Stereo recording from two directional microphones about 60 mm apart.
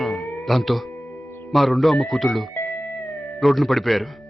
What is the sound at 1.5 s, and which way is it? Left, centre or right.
A man's voice, centre.